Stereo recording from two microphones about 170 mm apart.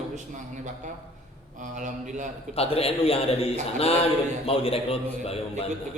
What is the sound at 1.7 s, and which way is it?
Speech, 45° right (ahead or behind).